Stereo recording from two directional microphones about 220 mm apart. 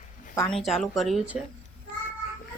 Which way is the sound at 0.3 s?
5° left (ahead or behind).